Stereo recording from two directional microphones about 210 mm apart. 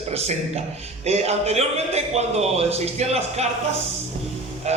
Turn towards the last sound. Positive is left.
turn(degrees=-30)  # may be behind; listen again after turning